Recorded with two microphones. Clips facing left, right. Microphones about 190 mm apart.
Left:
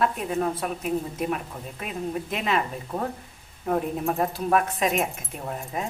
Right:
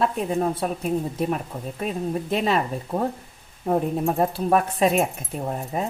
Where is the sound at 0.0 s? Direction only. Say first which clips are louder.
Right 2 dB; 30° right (ahead or behind).